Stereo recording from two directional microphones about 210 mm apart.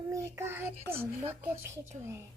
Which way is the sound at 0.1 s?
15° right (ahead or behind).